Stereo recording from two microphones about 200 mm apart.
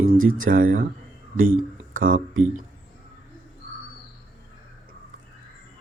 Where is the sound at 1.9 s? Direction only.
40° right (ahead or behind).